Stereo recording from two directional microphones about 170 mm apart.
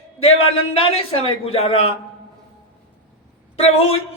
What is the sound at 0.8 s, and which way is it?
A man's voice, 35° left (ahead or behind).